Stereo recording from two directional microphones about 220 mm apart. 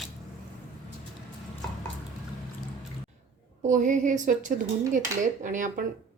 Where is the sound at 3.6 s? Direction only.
35° right (ahead or behind).